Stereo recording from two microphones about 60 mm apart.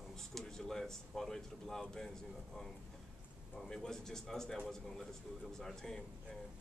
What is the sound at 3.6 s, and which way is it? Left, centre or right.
Speech, centre.